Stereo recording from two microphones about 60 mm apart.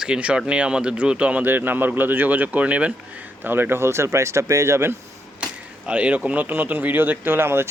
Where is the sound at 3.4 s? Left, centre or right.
Right.